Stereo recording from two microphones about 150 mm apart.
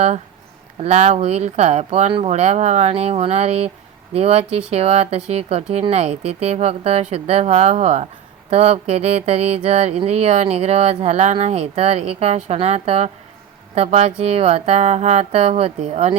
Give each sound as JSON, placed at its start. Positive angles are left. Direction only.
{"t": 0.8, "sound": "speech", "side_deg": -45}